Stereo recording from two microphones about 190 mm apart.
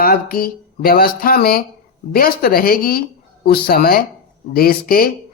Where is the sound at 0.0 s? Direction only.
50° left (ahead or behind).